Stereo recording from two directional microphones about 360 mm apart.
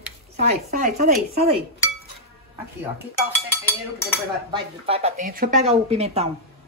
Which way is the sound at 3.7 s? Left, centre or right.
Centre.